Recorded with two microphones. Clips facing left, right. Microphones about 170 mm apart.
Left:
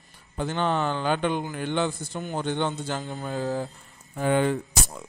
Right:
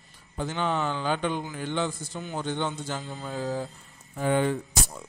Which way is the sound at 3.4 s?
40° left (ahead or behind).